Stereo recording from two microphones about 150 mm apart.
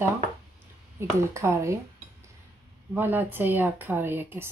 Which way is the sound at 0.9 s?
20° right (ahead or behind).